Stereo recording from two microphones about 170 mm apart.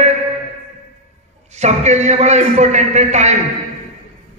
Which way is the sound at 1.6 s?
40° right (ahead or behind).